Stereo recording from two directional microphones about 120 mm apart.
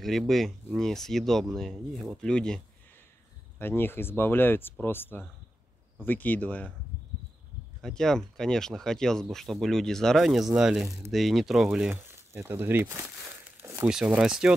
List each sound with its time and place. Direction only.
0.0 s speech: centre (ahead or behind)
3.5 s speech: 20° left (ahead or behind)
7.8 s speech: 5° left (ahead or behind)
11.9 s speech: 20° right (ahead or behind)
13.6 s crumpling: 20° right (ahead or behind)
13.8 s speech: 10° right (ahead or behind)